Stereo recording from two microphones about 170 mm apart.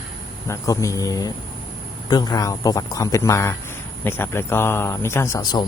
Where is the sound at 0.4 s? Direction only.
20° left (ahead or behind).